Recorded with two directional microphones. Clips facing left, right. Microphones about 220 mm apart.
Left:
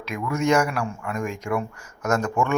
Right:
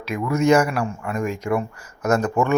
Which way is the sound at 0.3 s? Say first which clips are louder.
Right 4 dB; 5° right (ahead or behind).